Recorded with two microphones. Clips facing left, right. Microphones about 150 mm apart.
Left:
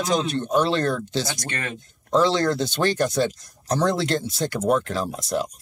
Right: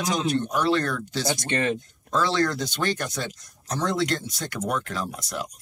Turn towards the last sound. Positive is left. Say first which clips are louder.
# left 6 dB
turn(degrees=30)  # may be behind; listen again after turning